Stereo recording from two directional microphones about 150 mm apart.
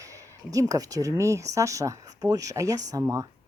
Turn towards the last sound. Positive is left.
turn(degrees=-20)  # may be behind; listen again after turning